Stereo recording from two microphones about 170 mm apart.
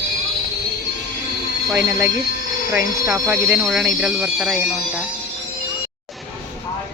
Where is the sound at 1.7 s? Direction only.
15° right (ahead or behind).